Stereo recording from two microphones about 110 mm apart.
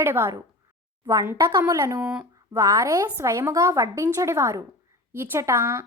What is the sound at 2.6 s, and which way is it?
A woman's voice, 30° right (ahead or behind).